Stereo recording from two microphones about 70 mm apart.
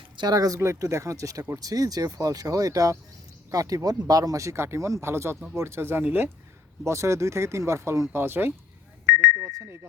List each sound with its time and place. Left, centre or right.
0.2 s speech: right
0.6 s speech: right
6.0 s speech: right
6.8 s speech: right